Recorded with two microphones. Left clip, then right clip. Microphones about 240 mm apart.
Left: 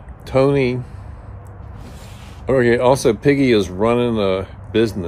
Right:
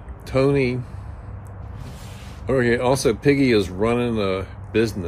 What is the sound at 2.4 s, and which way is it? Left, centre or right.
Speech, centre.